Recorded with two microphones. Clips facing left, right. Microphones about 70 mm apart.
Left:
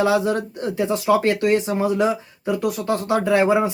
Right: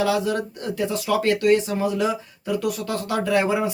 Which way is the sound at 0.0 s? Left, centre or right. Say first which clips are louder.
Left 3 dB; left.